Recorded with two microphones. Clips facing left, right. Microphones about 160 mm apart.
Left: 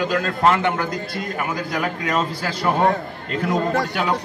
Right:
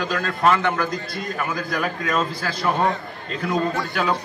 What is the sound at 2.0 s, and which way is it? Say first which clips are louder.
Speech: left 1 dB; 15° left (ahead or behind).